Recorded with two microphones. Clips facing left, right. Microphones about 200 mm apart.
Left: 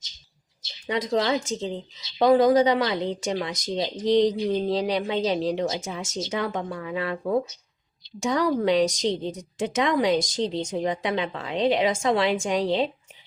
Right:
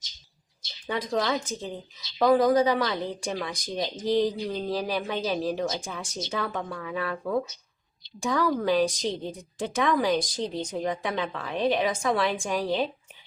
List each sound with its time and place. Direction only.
0.9 s speech: 20° left (ahead or behind)